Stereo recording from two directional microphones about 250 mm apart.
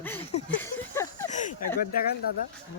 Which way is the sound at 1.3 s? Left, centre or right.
Left.